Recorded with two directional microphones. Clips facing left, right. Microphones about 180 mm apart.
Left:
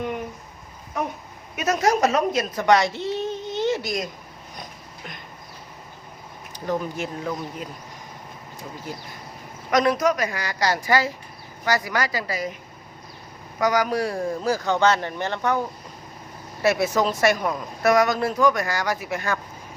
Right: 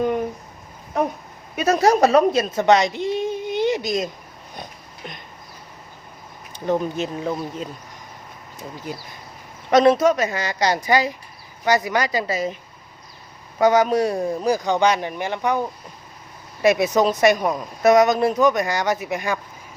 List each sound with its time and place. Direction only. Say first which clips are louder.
1.5 s a woman's voice: right 4 dB; 30° right (ahead or behind)
6.7 s speech: right 4 dB; 20° right (ahead or behind)
8.9 s a man's voice: right 2 dB; 15° right (ahead or behind)
13.6 s a man's voice: right 5 dB; 25° right (ahead or behind)
16.6 s speech: right 4 dB; 20° right (ahead or behind)